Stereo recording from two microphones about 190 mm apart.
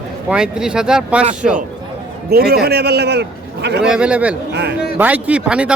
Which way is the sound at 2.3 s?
55° right (ahead or behind).